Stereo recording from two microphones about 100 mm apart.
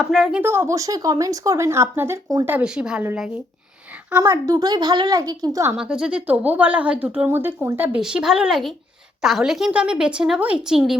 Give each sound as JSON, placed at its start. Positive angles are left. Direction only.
{"t": 0.0, "sound": "speech", "side_deg": 5}
{"t": 0.4, "sound": "speech", "side_deg": -25}
{"t": 2.6, "sound": "speech", "side_deg": -10}
{"t": 4.2, "sound": "speech", "side_deg": -30}
{"t": 5.7, "sound": "speech", "side_deg": -10}
{"t": 7.9, "sound": "speech", "side_deg": -10}